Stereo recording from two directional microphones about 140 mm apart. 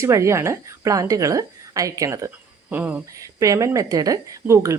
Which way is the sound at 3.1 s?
25° right (ahead or behind).